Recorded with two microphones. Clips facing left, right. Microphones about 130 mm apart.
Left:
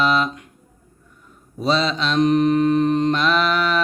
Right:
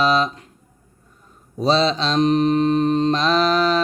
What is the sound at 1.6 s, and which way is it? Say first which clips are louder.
Mantra: right 2 dB; 30° right (ahead or behind).